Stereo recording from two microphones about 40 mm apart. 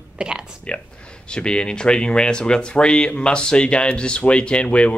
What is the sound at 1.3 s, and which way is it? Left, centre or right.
Speech, left.